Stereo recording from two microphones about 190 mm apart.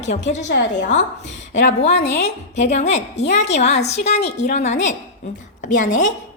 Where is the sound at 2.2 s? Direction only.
35° left (ahead or behind).